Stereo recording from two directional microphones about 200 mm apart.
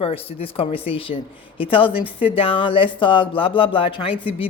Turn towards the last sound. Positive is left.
turn(degrees=25)  # may be behind; listen again after turning